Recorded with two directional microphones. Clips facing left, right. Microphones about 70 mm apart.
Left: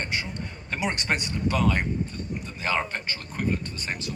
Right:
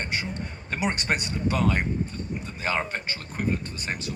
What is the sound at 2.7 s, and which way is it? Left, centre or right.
Speech, centre.